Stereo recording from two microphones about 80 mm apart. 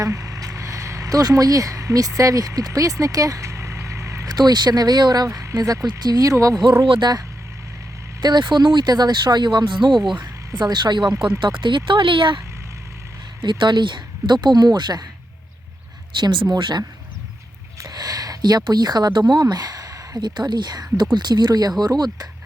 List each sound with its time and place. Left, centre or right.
0.0 s vehicle: right
4.3 s speech: right
6.3 s speech: right
6.8 s speech: right
8.2 s speech: right
11.3 s speech: right
13.4 s speech: right
14.4 s speech: right
16.1 s speech: right
17.7 s a sound: right
18.6 s speech: right